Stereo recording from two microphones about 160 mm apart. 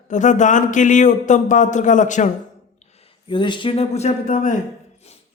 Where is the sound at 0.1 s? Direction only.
50° left (ahead or behind).